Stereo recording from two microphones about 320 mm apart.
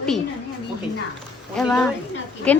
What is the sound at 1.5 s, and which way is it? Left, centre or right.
Speech, centre.